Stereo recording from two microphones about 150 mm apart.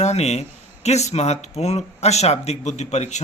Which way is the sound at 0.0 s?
45° left (ahead or behind).